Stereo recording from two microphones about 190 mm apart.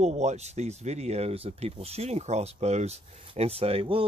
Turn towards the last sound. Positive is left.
turn(degrees=-30)  # may be behind; listen again after turning